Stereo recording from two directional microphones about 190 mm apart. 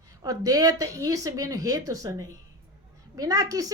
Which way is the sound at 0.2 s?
20° right (ahead or behind).